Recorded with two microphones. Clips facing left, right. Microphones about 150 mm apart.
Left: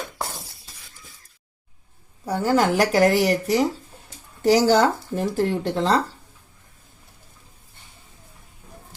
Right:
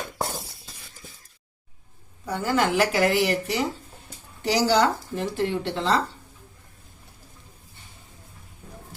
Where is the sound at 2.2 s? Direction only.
35° left (ahead or behind).